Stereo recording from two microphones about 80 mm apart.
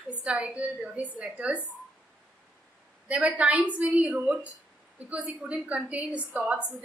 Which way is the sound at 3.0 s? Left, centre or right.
Centre.